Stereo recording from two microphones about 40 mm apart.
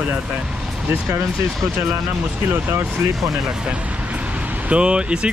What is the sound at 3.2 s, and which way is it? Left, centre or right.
Speech, centre.